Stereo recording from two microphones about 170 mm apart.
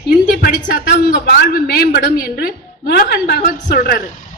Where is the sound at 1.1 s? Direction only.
65° left (ahead or behind).